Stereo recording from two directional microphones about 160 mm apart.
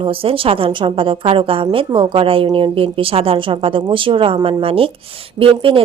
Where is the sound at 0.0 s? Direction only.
35° right (ahead or behind).